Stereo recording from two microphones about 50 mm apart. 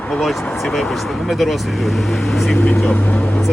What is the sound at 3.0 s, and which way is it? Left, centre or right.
Vehicle, left.